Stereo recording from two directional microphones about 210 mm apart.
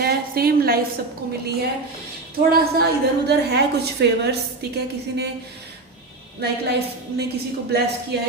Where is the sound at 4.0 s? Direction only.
50° right (ahead or behind).